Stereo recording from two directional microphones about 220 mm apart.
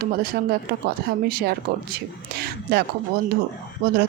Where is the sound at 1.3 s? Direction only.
45° right (ahead or behind).